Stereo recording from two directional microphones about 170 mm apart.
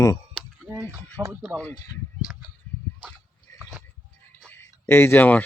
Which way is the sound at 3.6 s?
15° right (ahead or behind).